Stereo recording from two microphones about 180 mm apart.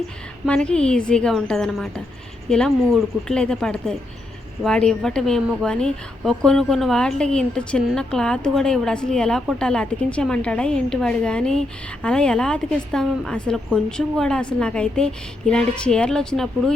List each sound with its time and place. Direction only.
0.4 s speech: 5° left (ahead or behind)